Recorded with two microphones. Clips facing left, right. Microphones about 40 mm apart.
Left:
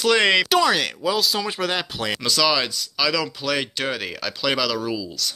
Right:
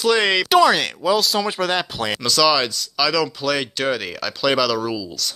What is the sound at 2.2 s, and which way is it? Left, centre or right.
Speech, centre.